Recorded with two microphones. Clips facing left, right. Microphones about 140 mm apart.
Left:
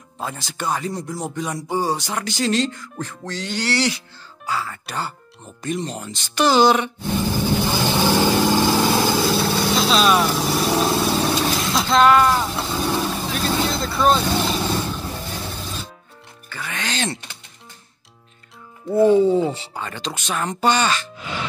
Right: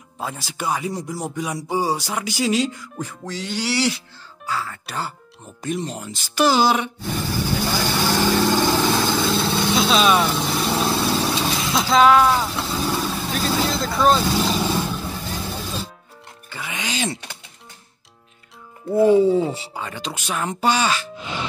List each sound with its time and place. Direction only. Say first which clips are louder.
0.2 s music: even; 5° right (ahead or behind)
4.5 s speech: left 1 dB; centre (ahead or behind)
7.2 s vehicle: left 2 dB; 15° left (ahead or behind); by 15.3 s 5° right (ahead or behind)
16.4 s music: left 1 dB; 15° right (ahead or behind)
18.9 s music: even; 5° right (ahead or behind)